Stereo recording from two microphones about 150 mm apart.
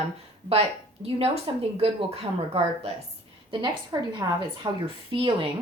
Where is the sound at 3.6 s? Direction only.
30° right (ahead or behind).